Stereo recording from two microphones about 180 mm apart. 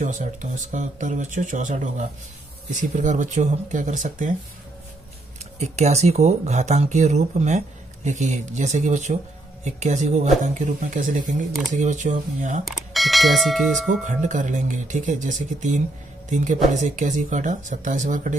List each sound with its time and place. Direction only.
0.0 s speech: 45° right (ahead or behind)
5.6 s speech: 40° right (ahead or behind)
12.6 s speech: centre (ahead or behind)
14.0 s speech: 45° right (ahead or behind)